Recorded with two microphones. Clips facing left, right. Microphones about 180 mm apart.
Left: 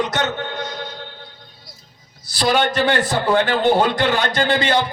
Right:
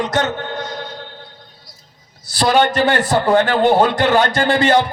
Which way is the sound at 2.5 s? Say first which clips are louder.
Right 4 dB; 50° right (ahead or behind).